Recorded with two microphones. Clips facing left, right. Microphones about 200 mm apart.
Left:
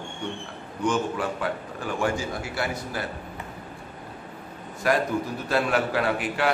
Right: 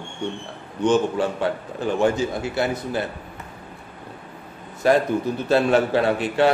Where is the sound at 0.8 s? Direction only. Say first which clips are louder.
Right 6 dB; 25° right (ahead or behind).